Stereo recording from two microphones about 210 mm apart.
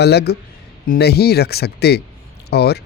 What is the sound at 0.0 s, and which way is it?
A man's voice, 50° left (ahead or behind).